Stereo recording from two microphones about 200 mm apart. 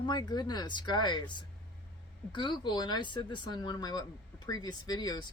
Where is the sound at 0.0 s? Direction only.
20° left (ahead or behind).